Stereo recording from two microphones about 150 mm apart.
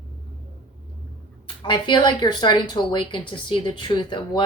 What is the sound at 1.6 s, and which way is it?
Speech, 30° left (ahead or behind).